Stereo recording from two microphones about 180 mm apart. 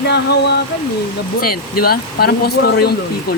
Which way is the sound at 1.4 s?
55° left (ahead or behind).